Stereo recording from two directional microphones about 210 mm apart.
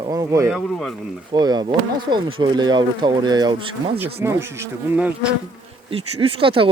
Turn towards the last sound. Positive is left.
turn(degrees=-25)  # may be behind; listen again after turning